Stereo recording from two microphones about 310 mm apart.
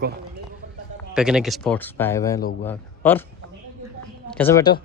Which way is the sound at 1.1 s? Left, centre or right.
Centre.